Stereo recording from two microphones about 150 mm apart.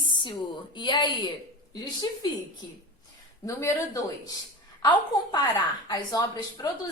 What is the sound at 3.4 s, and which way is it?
A woman's voice, 20° left (ahead or behind).